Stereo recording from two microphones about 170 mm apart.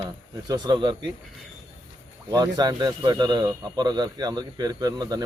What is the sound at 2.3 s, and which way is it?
Speech, 25° right (ahead or behind).